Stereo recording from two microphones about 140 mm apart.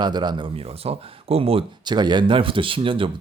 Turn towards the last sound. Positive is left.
turn(degrees=-40)  # may be behind; listen again after turning